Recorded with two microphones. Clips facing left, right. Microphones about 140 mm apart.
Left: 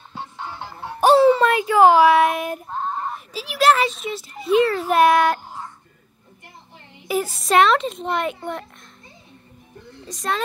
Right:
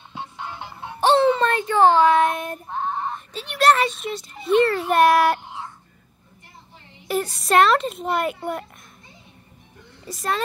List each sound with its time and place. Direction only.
1.0 s a child's voice: 5° left (ahead or behind)
7.1 s a child's voice: centre (ahead or behind)
10.0 s a child's voice: 5° right (ahead or behind)